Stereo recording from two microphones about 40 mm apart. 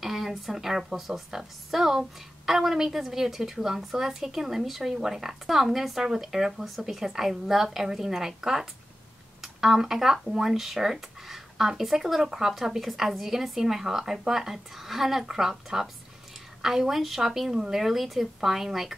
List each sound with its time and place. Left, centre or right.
0.0 s speech: centre